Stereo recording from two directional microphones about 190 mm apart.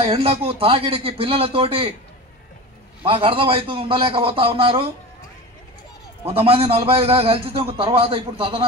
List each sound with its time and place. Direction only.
0.0 s a man's voice: 30° right (ahead or behind)
3.0 s a man's voice: 30° right (ahead or behind)
6.2 s a man's voice: 30° right (ahead or behind)